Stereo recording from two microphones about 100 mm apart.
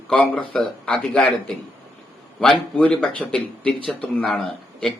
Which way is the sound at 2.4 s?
10° left (ahead or behind).